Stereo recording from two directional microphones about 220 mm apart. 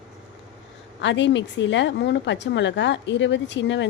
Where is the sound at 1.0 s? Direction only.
55° left (ahead or behind).